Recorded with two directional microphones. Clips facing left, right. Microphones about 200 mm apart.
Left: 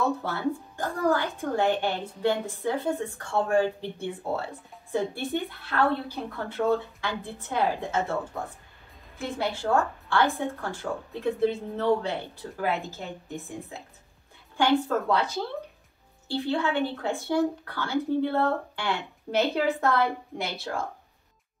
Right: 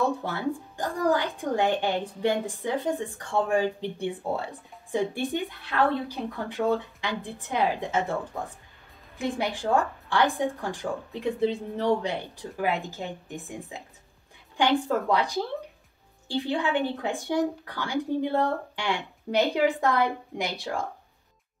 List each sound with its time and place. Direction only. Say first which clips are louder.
0.2 s speech: left 1 dB; 15° right (ahead or behind)
14.6 s speech: even; 15° right (ahead or behind)